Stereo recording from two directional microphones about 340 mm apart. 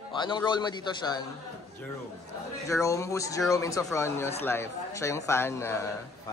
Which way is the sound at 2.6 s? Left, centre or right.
Centre.